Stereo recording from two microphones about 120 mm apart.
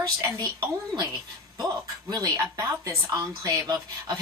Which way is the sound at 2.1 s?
30° right (ahead or behind).